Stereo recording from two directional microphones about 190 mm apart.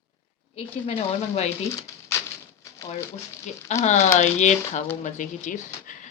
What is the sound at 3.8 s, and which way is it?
A woman's voice, 40° left (ahead or behind).